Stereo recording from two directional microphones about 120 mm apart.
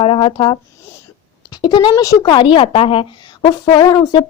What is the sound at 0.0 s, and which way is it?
A woman's voice, 50° left (ahead or behind).